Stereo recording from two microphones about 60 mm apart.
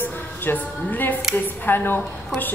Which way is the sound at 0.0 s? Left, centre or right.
Left.